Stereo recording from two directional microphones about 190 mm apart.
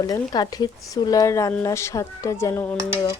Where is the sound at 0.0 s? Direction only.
20° left (ahead or behind).